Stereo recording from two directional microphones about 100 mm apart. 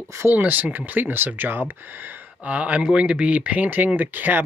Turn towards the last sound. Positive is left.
turn(degrees=-15)  # may be behind; listen again after turning